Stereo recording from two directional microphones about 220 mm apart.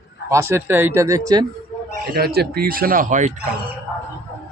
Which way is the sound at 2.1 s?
45° right (ahead or behind).